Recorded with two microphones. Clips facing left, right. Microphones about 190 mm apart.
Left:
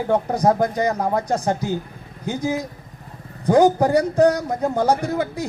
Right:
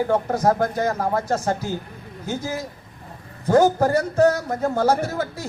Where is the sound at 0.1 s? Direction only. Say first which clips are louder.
Left 1 dB; 15° left (ahead or behind).